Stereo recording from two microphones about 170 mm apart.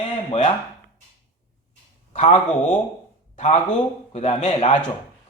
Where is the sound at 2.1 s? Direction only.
40° left (ahead or behind).